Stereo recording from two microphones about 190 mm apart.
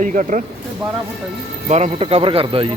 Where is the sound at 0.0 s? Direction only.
40° right (ahead or behind).